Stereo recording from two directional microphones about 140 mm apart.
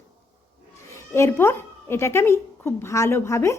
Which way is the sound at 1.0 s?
20° left (ahead or behind).